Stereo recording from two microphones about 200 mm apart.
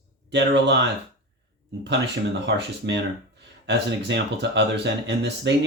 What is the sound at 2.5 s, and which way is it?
Speech, 60° right (ahead or behind).